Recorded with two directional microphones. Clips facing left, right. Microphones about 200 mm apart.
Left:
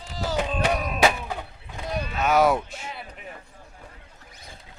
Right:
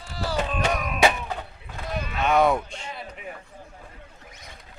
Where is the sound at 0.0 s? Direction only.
20° left (ahead or behind).